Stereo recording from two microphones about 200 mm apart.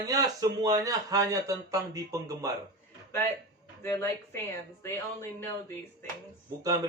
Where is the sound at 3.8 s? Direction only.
15° left (ahead or behind).